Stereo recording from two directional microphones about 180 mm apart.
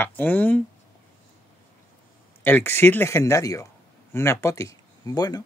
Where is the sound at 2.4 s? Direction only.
10° left (ahead or behind).